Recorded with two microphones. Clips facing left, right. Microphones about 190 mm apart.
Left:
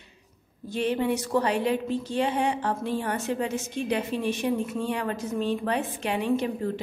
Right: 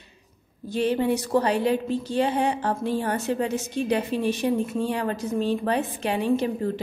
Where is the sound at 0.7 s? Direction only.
35° right (ahead or behind).